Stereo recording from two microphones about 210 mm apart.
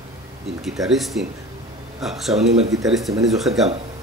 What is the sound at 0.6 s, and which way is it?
Speech, centre (ahead or behind).